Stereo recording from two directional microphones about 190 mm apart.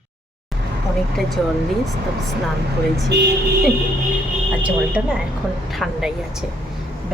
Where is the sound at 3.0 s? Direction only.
60° right (ahead or behind).